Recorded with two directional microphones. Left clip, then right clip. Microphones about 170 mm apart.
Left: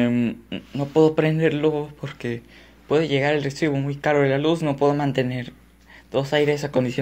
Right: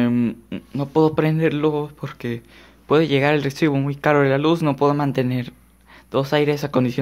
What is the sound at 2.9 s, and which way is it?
Speech, 40° right (ahead or behind).